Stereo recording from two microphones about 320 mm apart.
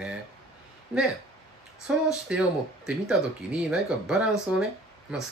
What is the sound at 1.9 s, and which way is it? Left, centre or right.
Speech, centre.